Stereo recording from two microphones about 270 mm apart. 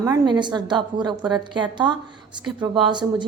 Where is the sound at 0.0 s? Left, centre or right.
Centre.